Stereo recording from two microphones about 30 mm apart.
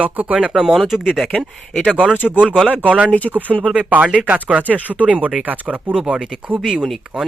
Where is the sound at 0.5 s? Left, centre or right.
Centre.